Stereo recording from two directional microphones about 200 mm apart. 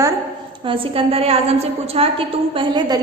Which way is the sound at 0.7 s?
30° right (ahead or behind).